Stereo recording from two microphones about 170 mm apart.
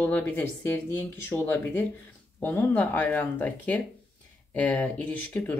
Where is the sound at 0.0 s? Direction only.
10° left (ahead or behind).